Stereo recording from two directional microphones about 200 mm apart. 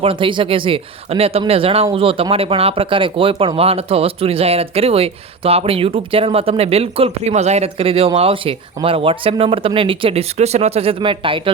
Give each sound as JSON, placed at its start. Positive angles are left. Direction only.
{"t": 0.0, "sound": "speech", "side_deg": -25}